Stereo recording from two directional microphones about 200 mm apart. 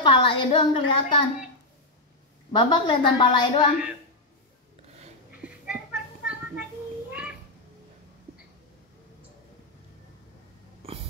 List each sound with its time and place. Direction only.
0.0 s a woman's voice: 25° left (ahead or behind)
2.5 s a woman's voice: 25° left (ahead or behind)
5.4 s a sound: 5° right (ahead or behind)